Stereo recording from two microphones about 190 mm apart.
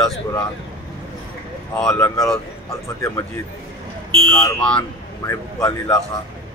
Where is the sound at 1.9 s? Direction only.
15° left (ahead or behind).